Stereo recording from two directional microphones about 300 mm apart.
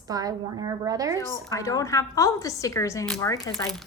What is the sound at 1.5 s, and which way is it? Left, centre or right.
A woman's voice, centre.